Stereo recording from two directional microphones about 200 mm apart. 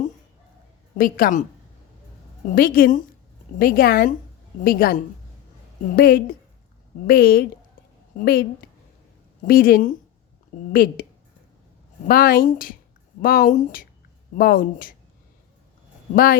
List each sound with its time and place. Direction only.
0.9 s speech: 45° left (ahead or behind)
2.6 s speech: 45° left (ahead or behind)
9.5 s speech: 45° left (ahead or behind)
12.0 s speech: 45° left (ahead or behind)
16.1 s speech: 45° left (ahead or behind)